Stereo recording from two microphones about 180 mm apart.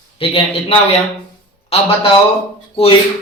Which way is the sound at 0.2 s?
30° left (ahead or behind).